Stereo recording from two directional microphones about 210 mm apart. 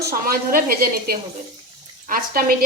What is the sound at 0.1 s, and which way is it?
A woman's voice, 45° right (ahead or behind).